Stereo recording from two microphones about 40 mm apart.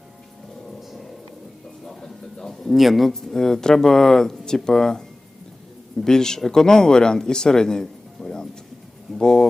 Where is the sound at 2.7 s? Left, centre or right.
Centre.